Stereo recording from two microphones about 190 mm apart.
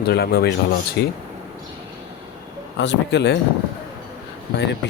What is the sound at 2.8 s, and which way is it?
Speech, 65° left (ahead or behind).